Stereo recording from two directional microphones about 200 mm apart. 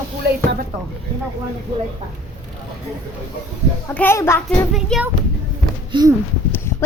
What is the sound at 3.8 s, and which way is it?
Speech, 10° left (ahead or behind).